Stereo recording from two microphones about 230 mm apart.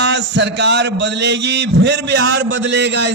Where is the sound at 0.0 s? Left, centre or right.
Right.